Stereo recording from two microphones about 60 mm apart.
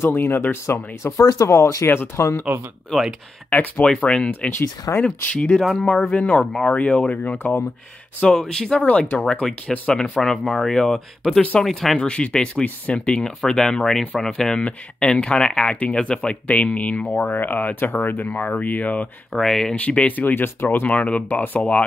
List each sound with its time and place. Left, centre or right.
0.0 s speech: left
0.7 s speech: left
1.9 s speech: left
2.9 s speech: centre
3.4 s speech: left
3.8 s speech: centre
5.6 s speech: centre
6.1 s speech: left
8.2 s speech: centre
12.0 s speech: centre
19.3 s speech: centre
19.7 s speech: centre
20.1 s speech: left